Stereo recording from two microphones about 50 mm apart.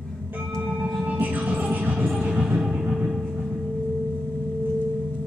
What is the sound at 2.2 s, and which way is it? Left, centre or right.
Train, centre.